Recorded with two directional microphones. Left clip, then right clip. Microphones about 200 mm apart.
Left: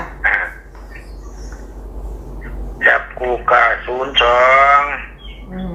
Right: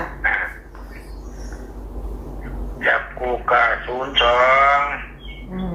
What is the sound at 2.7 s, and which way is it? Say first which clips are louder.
A man's voice: left 6 dB; 30° left (ahead or behind).